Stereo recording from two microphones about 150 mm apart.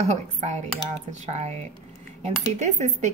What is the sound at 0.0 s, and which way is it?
Speech, 50° right (ahead or behind).